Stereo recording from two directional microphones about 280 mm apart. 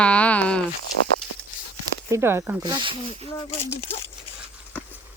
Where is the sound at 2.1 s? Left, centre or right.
Centre.